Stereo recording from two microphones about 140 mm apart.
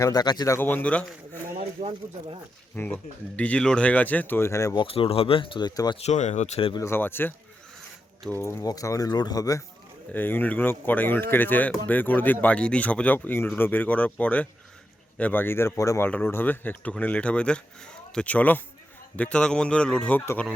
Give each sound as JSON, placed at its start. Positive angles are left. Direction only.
{"t": 0.0, "sound": "speech", "side_deg": 30}
{"t": 1.8, "sound": "speech", "side_deg": -75}
{"t": 2.7, "sound": "speech", "side_deg": 10}
{"t": 4.8, "sound": "speech", "side_deg": 40}
{"t": 6.0, "sound": "speech", "side_deg": 55}
{"t": 6.7, "sound": "speech", "side_deg": 20}
{"t": 10.1, "sound": "speech", "side_deg": 15}